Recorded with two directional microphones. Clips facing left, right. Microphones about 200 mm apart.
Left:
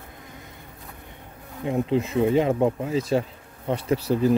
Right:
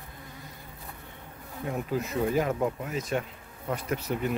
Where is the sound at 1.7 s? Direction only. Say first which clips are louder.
Left 7 dB; 25° left (ahead or behind).